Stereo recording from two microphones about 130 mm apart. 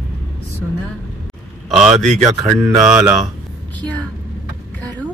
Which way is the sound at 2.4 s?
25° right (ahead or behind).